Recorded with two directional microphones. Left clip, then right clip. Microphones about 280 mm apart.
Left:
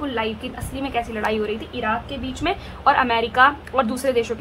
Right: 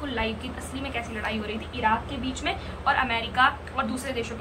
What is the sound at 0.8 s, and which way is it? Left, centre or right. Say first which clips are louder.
A woman's voice: left 8 dB; centre.